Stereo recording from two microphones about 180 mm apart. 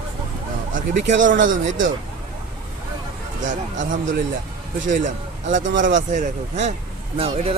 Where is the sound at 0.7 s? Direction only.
45° right (ahead or behind).